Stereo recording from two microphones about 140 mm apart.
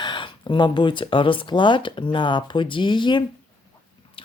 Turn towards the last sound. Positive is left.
turn(degrees=40)  # may be behind; listen again after turning